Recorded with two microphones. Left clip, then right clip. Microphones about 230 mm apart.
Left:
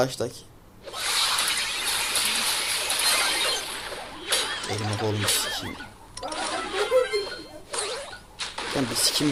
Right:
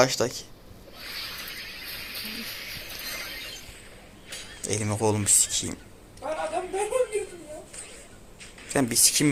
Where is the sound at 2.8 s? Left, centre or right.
Centre.